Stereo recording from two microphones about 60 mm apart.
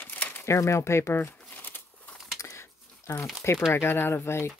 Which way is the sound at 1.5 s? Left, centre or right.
Left.